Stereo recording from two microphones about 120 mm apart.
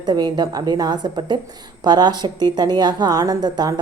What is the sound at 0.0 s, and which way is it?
Speech, 35° right (ahead or behind).